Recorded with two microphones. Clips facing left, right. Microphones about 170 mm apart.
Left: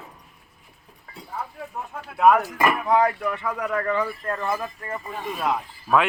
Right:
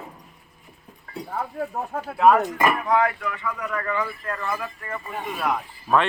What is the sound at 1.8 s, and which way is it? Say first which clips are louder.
Speech: even; 45° right (ahead or behind).